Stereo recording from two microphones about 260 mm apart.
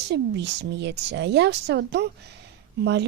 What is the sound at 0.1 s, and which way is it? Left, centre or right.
A woman's voice, right.